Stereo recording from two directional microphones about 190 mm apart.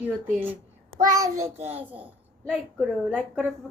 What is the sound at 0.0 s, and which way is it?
A child's voice, 10° right (ahead or behind).